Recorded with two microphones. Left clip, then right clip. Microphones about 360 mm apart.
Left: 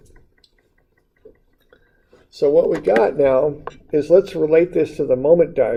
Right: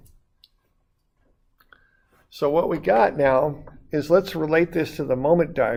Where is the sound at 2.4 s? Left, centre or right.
Right.